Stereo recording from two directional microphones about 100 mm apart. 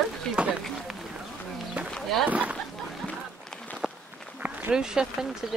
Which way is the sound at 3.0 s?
15° left (ahead or behind).